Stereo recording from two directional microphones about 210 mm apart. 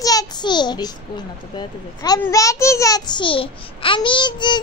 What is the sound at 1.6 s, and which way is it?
A child's voice, 20° left (ahead or behind).